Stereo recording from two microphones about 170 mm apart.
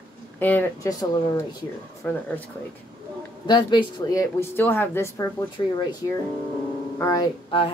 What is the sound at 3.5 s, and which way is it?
Speech, 30° left (ahead or behind).